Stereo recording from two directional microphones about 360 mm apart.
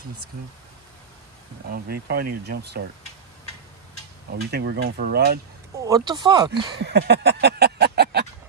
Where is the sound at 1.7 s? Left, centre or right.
Right.